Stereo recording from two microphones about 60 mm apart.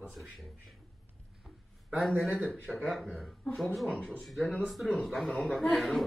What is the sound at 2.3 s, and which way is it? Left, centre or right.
Speech, centre.